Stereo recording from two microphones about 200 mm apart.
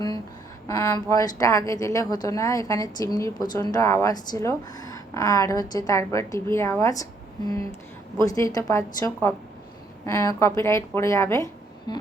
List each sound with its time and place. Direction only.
0.7 s speech: 15° left (ahead or behind)
8.2 s speech: 15° left (ahead or behind)
11.9 s a sound: 20° left (ahead or behind)